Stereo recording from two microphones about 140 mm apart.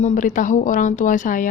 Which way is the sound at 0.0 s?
65° left (ahead or behind).